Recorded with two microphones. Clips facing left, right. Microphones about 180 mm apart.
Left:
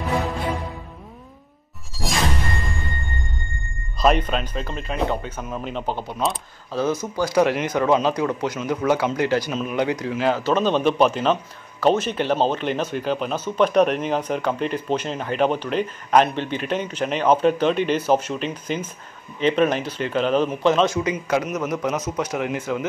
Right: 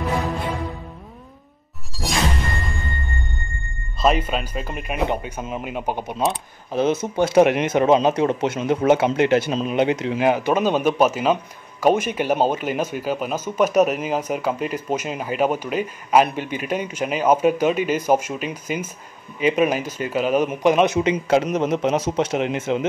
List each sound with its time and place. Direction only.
4.0 s speech: 5° right (ahead or behind); by 22.8 s 25° right (ahead or behind)